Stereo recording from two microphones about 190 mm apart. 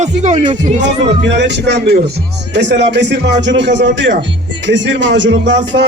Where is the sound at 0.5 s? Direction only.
65° right (ahead or behind).